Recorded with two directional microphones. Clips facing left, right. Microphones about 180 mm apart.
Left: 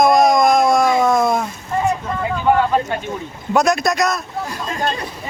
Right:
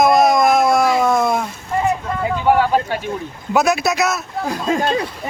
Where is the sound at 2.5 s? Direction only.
5° right (ahead or behind).